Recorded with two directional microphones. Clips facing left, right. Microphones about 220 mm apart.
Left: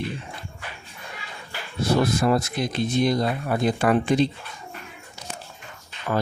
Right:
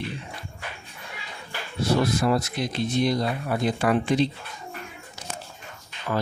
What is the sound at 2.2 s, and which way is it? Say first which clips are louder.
Speech: left 2 dB; 50° left (ahead or behind).